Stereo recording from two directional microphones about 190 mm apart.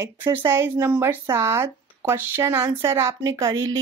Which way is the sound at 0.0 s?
15° right (ahead or behind).